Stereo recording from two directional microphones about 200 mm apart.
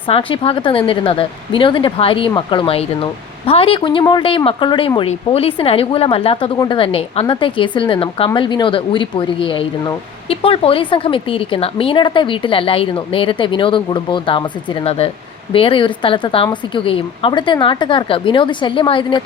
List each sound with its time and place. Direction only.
0.1 s speech: 25° left (ahead or behind)